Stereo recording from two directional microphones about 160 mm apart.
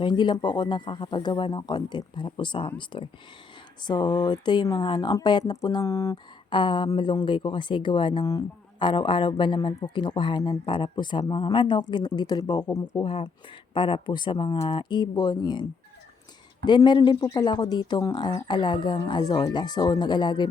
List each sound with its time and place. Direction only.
0.0 s speech: 30° left (ahead or behind)
6.5 s speech: 30° left (ahead or behind)
16.6 s speech: 30° left (ahead or behind)